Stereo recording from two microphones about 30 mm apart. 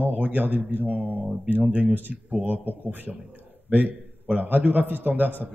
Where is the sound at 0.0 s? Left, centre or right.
Right.